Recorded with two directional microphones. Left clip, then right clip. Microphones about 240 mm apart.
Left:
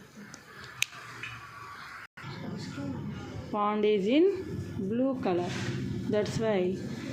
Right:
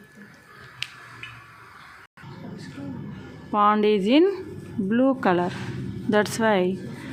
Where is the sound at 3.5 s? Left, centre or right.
Right.